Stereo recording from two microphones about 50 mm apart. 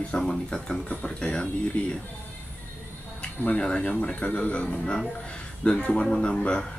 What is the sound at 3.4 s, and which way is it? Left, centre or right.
Speech, centre.